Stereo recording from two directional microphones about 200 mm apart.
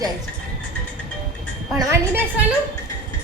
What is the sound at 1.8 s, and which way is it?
Speech, 15° right (ahead or behind).